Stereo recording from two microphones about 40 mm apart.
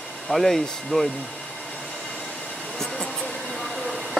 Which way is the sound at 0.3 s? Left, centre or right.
Centre.